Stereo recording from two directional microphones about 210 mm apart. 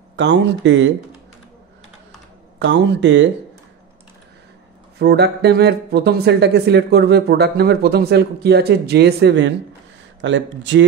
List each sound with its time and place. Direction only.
0.1 s speech: 60° right (ahead or behind)
2.6 s speech: 60° right (ahead or behind)
4.9 s speech: 50° right (ahead or behind)